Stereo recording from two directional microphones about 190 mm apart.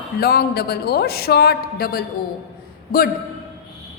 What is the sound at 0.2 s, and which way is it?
A woman's voice, 55° left (ahead or behind).